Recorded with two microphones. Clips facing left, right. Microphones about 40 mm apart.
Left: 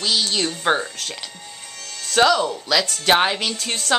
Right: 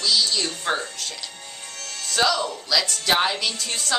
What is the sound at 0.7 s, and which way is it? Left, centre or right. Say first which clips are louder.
Speech: left 6 dB; left.